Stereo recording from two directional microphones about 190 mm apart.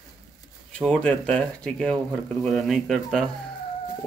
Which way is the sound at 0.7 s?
5° left (ahead or behind).